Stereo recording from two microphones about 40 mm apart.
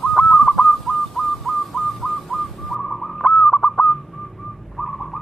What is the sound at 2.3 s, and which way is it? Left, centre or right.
Whistling, centre.